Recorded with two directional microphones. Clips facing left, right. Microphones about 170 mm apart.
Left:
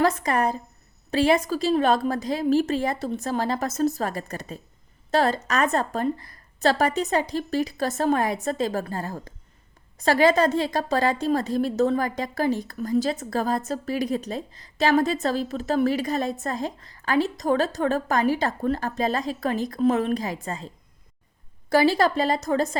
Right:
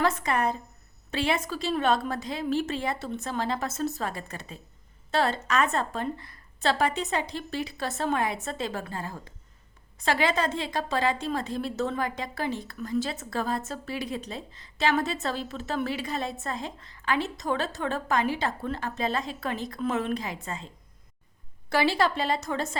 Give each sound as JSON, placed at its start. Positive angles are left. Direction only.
{"t": 0.0, "sound": "a woman's voice", "side_deg": 40}
{"t": 21.7, "sound": "a woman's voice", "side_deg": 40}